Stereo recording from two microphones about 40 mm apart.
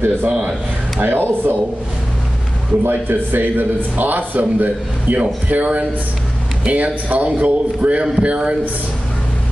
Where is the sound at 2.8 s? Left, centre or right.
Right.